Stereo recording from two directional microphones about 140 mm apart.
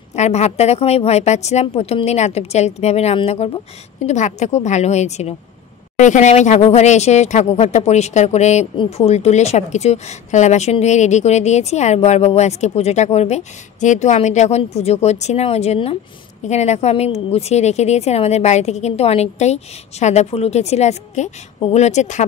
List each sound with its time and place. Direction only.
0.1 s a woman's voice: 50° left (ahead or behind)
4.0 s a woman's voice: 55° left (ahead or behind)